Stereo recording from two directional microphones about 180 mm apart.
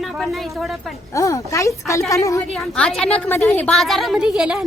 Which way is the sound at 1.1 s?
15° left (ahead or behind).